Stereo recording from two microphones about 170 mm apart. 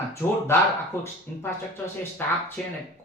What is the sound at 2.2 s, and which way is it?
Speech, 10° left (ahead or behind).